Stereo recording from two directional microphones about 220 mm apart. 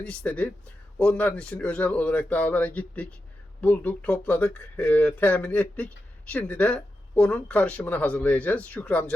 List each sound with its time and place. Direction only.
0.0 s speech: 5° left (ahead or behind)